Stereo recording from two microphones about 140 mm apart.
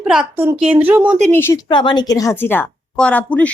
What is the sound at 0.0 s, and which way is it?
A woman's voice, 10° right (ahead or behind).